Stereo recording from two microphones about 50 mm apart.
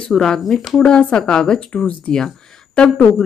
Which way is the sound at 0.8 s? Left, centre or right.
Centre.